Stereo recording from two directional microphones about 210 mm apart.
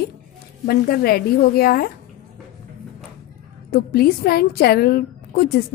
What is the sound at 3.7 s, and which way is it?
A woman's voice, 45° left (ahead or behind).